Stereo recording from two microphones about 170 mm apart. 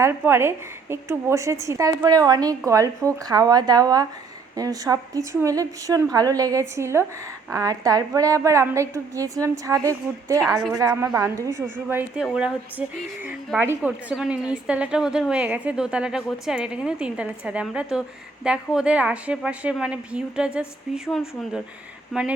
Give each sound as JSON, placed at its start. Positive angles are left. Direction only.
{"t": 0.0, "sound": "a woman's voice", "side_deg": -15}